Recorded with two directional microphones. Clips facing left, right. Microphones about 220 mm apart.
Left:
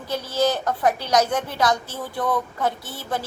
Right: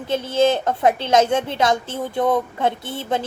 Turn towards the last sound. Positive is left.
turn(degrees=-25)  # may be behind; listen again after turning